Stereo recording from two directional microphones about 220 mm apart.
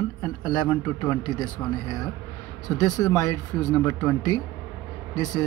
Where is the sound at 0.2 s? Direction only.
20° left (ahead or behind).